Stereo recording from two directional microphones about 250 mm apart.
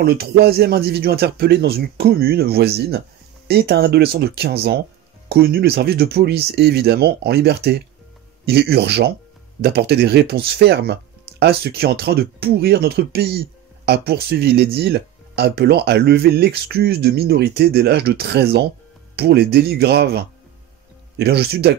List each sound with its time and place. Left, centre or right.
0.0 s speech: right
21.2 s speech: right